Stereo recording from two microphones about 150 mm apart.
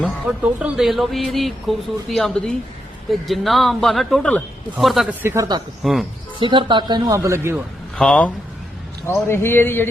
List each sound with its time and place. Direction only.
0.0 s speech: 5° right (ahead or behind)
5.2 s speech: 15° right (ahead or behind)
5.8 s speech: centre (ahead or behind)
6.4 s speech: 35° right (ahead or behind); by 7.6 s 15° right (ahead or behind)
7.9 s a man's voice: 5° left (ahead or behind)